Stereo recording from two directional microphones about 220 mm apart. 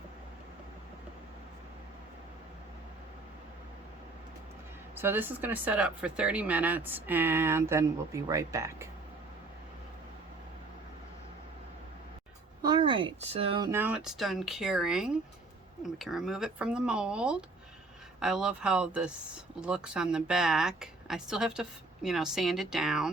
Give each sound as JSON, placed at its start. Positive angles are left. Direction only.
{"t": 4.9, "sound": "speech", "side_deg": -10}
{"t": 12.6, "sound": "speech", "side_deg": -20}
{"t": 13.7, "sound": "speech", "side_deg": -10}